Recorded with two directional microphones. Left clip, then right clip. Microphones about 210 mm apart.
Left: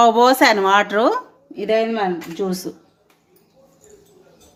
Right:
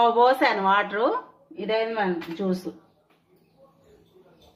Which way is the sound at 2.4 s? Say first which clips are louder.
Left 5 dB; 35° left (ahead or behind).